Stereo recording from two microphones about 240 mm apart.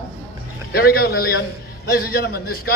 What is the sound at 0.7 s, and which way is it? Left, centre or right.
A man's voice, left.